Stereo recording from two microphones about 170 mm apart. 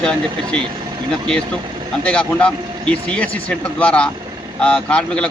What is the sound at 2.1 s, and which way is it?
Speech, 5° left (ahead or behind).